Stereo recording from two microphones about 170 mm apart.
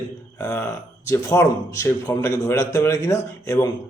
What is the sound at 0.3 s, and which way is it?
A man's voice, 15° left (ahead or behind).